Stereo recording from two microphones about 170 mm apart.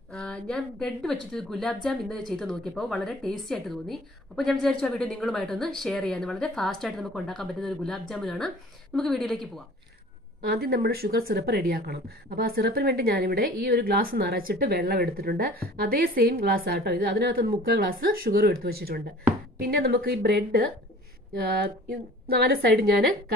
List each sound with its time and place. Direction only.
0.1 s a woman's voice: 5° left (ahead or behind)
10.4 s speech: 65° right (ahead or behind)
22.3 s speech: 65° right (ahead or behind)